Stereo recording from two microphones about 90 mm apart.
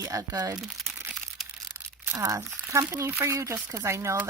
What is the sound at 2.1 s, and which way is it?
Speech, 40° right (ahead or behind).